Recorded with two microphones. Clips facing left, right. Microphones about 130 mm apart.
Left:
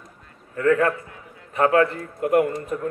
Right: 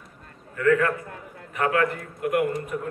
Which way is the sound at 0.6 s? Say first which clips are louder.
Left 2 dB; 30° left (ahead or behind).